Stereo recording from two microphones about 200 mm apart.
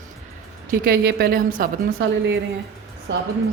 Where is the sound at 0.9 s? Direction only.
50° right (ahead or behind).